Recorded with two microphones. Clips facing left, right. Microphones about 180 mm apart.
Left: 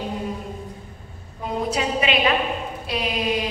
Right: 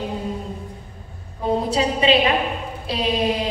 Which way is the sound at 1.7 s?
30° right (ahead or behind).